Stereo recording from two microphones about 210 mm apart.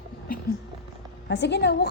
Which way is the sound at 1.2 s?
55° left (ahead or behind).